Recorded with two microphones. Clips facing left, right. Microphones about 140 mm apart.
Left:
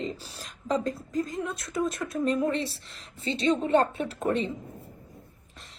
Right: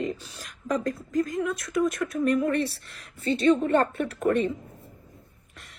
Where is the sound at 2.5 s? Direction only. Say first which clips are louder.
Right 4 dB; 60° right (ahead or behind).